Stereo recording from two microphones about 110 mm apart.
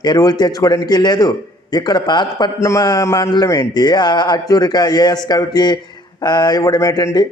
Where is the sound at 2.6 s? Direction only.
25° left (ahead or behind).